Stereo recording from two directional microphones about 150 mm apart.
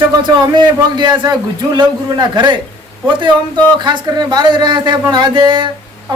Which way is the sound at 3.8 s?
30° right (ahead or behind).